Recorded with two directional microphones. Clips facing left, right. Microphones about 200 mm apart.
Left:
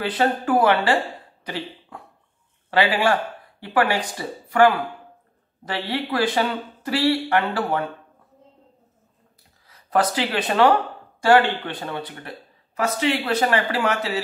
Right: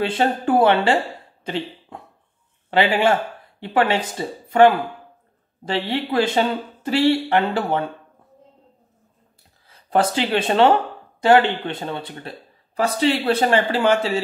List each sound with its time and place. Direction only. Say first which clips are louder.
0.0 s speech: right 2 dB; 25° right (ahead or behind)
1.4 s cough: right 4 dB; 25° right (ahead or behind)
2.7 s speech: right 2 dB; 25° right (ahead or behind)
9.7 s speech: right 2 dB; 25° right (ahead or behind)